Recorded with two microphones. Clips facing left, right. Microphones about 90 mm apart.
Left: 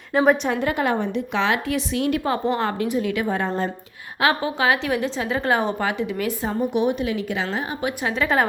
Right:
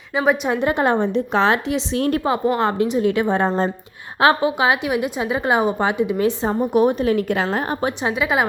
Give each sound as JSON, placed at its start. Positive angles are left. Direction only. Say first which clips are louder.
{"t": 0.1, "sound": "a woman's voice", "louder": "left 1 dB", "side_deg": 0}
{"t": 0.4, "sound": "a woman's voice", "louder": "right 3 dB", "side_deg": -20}
{"t": 1.6, "sound": "a woman's voice", "louder": "right 2 dB", "side_deg": -20}
{"t": 2.0, "sound": "a woman's voice", "louder": "right 3 dB", "side_deg": -40}
{"t": 2.2, "sound": "a woman's voice", "louder": "right 3 dB", "side_deg": -20}
{"t": 6.7, "sound": "a woman's voice", "louder": "right 8 dB", "side_deg": -45}
{"t": 8.1, "sound": "a woman's voice", "louder": "left 1 dB", "side_deg": -10}